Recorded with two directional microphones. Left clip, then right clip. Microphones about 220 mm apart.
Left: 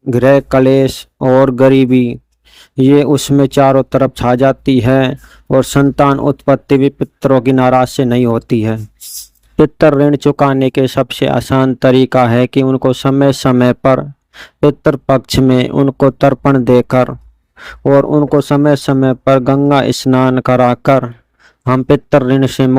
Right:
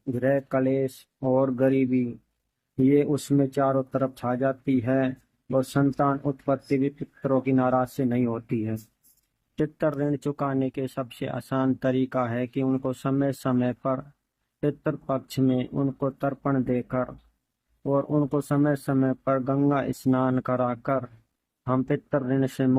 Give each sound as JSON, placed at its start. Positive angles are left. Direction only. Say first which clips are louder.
{"t": 0.2, "sound": "speech", "louder": "left 16 dB", "side_deg": 45}
{"t": 17.9, "sound": "speech", "louder": "left 15 dB", "side_deg": 35}